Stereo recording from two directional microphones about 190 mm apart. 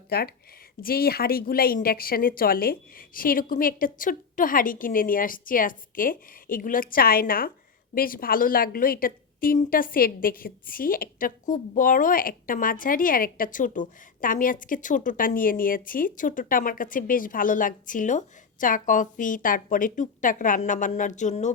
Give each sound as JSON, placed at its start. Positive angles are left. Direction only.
{"t": 0.1, "sound": "a woman's voice", "side_deg": 55}